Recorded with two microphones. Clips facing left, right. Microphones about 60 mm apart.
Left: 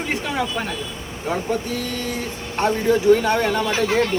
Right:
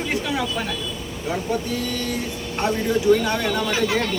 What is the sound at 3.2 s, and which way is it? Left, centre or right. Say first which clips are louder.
Speech: left 3 dB; left.